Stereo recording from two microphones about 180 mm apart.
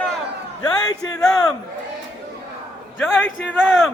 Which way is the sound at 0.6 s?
20° left (ahead or behind).